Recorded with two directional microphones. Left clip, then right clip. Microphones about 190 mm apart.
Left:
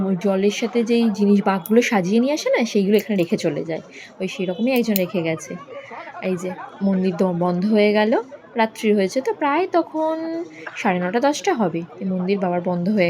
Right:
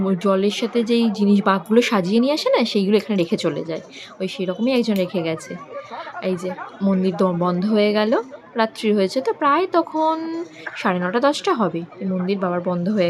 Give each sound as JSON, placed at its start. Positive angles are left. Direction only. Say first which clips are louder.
{"t": 0.2, "sound": "a woman's voice", "louder": "even", "side_deg": -5}
{"t": 10.1, "sound": "speech", "louder": "right 2 dB", "side_deg": -15}
{"t": 10.8, "sound": "a woman's voice", "louder": "even", "side_deg": -5}